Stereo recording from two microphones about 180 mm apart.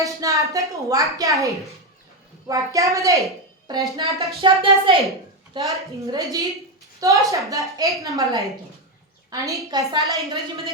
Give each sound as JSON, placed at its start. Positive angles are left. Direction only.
{"t": 0.0, "sound": "a woman's voice", "side_deg": -20}